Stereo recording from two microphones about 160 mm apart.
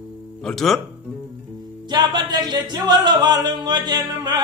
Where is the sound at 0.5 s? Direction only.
Centre (ahead or behind).